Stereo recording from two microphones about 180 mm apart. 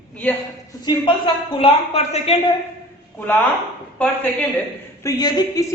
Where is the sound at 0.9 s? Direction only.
30° left (ahead or behind).